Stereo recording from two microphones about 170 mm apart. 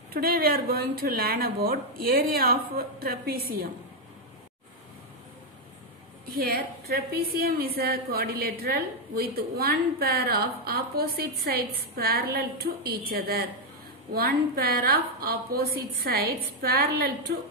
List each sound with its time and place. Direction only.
0.1 s a woman's voice: 65° right (ahead or behind)
6.3 s a woman's voice: 65° right (ahead or behind)